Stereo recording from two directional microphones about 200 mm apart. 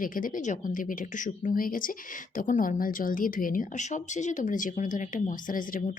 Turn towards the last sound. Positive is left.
turn(degrees=45)  # may be behind; listen again after turning